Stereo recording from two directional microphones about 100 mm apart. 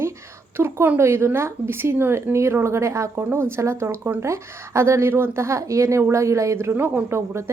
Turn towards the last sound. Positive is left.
turn(degrees=-25)  # may be behind; listen again after turning